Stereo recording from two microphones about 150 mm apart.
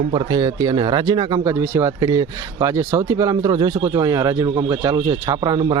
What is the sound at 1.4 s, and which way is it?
Speech, 15° right (ahead or behind).